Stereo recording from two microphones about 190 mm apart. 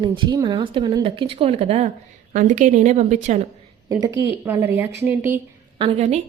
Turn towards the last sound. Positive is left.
turn(degrees=-35)  # may be behind; listen again after turning